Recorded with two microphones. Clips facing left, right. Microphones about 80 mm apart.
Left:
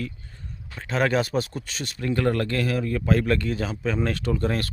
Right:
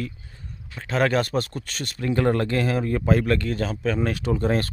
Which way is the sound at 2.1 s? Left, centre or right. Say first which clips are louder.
Right 2 dB; centre.